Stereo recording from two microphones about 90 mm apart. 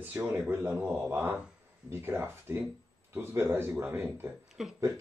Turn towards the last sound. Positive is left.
turn(degrees=-5)  # may be behind; listen again after turning